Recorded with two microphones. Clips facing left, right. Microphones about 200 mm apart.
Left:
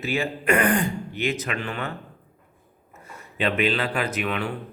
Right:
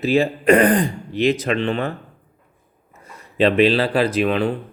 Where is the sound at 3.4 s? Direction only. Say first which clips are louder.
Right 8 dB; 35° right (ahead or behind).